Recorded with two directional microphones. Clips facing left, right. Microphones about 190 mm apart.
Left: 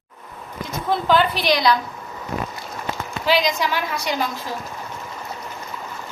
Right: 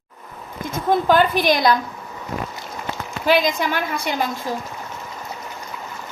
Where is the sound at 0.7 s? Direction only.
50° right (ahead or behind).